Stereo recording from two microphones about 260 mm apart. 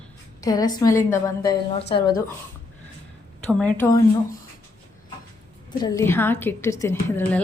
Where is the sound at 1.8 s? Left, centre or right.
Left.